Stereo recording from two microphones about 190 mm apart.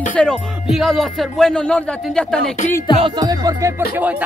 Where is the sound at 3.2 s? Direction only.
20° right (ahead or behind).